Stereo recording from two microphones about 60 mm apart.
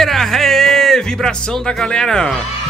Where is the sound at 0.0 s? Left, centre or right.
Centre.